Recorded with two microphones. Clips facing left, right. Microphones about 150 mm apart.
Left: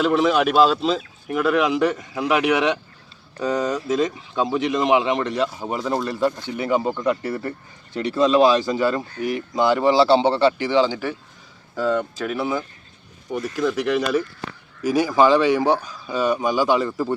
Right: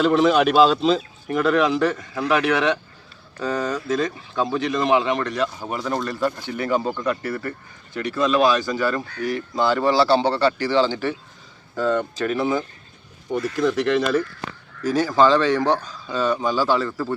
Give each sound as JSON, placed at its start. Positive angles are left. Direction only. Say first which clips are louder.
{"t": 0.0, "sound": "speech", "louder": "right 1 dB", "side_deg": 5}